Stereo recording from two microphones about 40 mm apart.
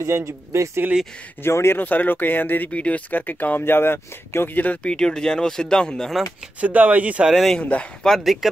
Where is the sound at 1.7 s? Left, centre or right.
Left.